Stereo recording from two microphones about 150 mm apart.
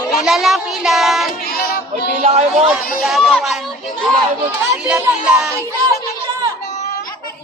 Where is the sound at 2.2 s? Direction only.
45° right (ahead or behind).